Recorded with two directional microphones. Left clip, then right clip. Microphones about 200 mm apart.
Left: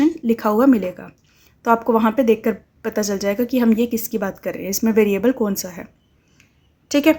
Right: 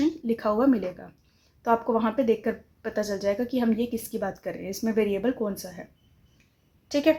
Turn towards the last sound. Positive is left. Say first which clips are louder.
# left 6 dB
turn(degrees=40)  # may be behind; listen again after turning